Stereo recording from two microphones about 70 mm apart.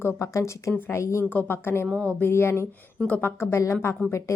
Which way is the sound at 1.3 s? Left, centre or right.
Left.